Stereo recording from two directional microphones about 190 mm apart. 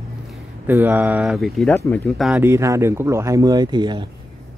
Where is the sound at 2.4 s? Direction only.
15° right (ahead or behind).